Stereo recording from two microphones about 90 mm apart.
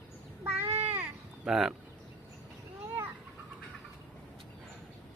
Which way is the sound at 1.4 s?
5° right (ahead or behind).